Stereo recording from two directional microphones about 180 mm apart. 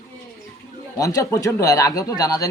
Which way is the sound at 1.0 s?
20° left (ahead or behind).